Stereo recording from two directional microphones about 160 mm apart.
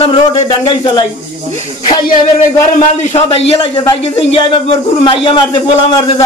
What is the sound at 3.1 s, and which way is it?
A man's voice, 40° left (ahead or behind).